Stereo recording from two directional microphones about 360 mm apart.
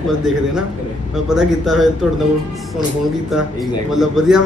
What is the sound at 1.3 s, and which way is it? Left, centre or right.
Speech, centre.